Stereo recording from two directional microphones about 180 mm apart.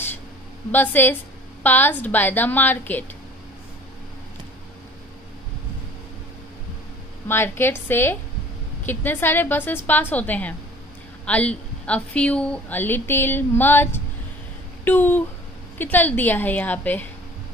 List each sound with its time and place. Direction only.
0.7 s a woman's voice: 10° left (ahead or behind)
7.2 s a woman's voice: 10° left (ahead or behind)